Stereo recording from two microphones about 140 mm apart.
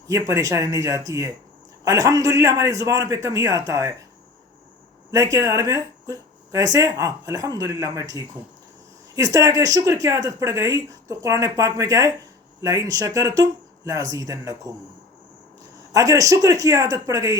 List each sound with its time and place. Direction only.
0.1 s speech: 25° right (ahead or behind)
5.1 s speech: 25° right (ahead or behind)
15.9 s speech: 25° right (ahead or behind)